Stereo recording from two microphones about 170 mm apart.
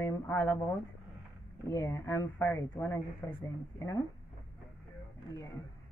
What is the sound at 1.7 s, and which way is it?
Speech, 15° left (ahead or behind).